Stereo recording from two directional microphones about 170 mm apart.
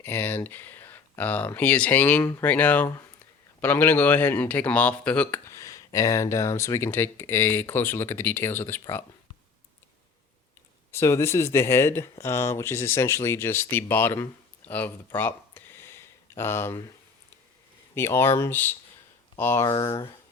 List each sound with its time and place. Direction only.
0.0 s speech: 10° left (ahead or behind)
10.9 s speech: 15° left (ahead or behind)
14.7 s a sound: 10° left (ahead or behind)
17.9 s speech: 15° left (ahead or behind)
19.6 s speech: 25° left (ahead or behind)